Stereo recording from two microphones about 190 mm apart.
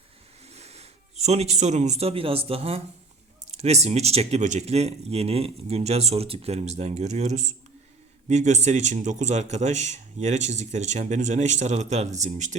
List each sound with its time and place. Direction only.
0.4 s speech: 35° right (ahead or behind)